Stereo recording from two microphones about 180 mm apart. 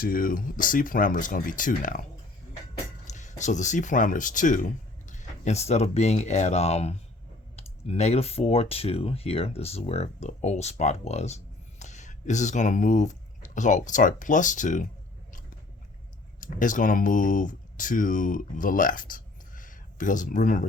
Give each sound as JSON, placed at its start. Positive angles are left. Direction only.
{"t": 0.0, "sound": "speech", "side_deg": 50}
{"t": 3.1, "sound": "speech", "side_deg": 40}
{"t": 16.4, "sound": "speech", "side_deg": 45}